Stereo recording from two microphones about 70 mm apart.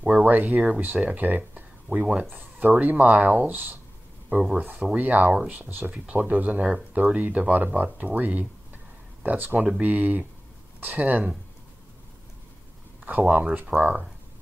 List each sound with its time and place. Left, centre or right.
0.2 s speech: right
1.5 s a sound: right
2.2 s speech: right
4.4 s speech: centre
13.3 s speech: right